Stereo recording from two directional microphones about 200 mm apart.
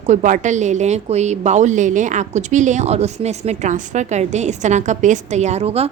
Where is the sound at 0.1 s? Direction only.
35° right (ahead or behind).